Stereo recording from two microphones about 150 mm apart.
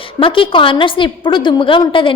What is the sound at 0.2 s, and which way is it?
A woman's voice, 35° left (ahead or behind).